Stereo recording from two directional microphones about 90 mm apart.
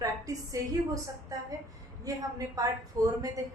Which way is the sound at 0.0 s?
40° right (ahead or behind).